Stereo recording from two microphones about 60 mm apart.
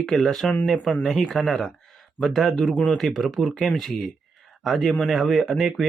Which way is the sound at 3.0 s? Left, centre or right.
Centre.